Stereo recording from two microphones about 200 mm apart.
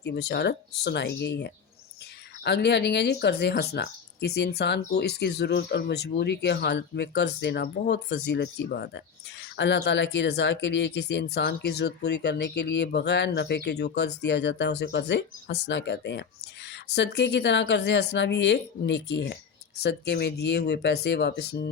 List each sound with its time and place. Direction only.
0.0 s speech: 55° left (ahead or behind)